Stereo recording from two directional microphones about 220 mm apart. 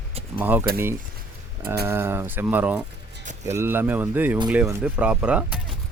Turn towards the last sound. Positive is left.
turn(degrees=-5)  # may be behind; listen again after turning